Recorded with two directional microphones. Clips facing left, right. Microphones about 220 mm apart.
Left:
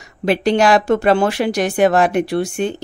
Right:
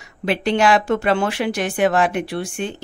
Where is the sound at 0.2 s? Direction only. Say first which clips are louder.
Left 4 dB; 40° left (ahead or behind).